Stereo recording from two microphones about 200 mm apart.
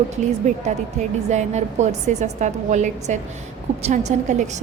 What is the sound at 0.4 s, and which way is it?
A woman's voice, 40° right (ahead or behind).